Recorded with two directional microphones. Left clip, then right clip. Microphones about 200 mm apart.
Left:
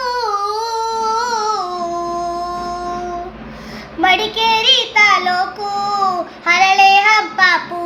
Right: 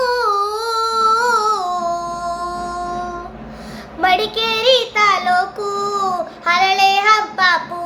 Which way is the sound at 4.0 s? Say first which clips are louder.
Left 2 dB; 20° right (ahead or behind).